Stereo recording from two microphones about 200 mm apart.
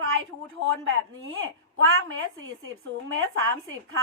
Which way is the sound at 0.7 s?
85° right.